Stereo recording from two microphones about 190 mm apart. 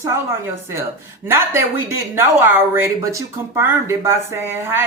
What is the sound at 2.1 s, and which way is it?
A man's voice, 10° right (ahead or behind).